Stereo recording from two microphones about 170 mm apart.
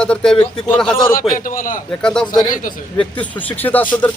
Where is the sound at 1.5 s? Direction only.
50° left (ahead or behind).